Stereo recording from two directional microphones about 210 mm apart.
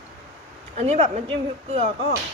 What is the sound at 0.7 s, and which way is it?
Speech, 30° right (ahead or behind).